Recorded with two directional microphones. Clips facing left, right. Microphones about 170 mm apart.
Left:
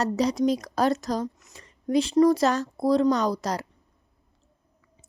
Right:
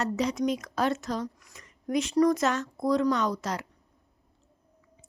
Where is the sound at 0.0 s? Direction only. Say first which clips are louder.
Left 4 dB; 35° left (ahead or behind).